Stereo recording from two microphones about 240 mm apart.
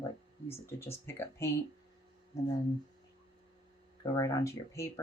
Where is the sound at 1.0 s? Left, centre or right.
Centre.